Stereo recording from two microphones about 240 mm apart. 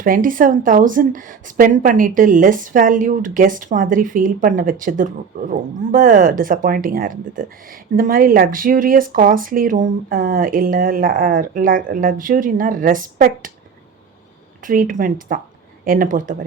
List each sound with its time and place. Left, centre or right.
0.0 s a woman's voice: right
14.6 s a woman's voice: right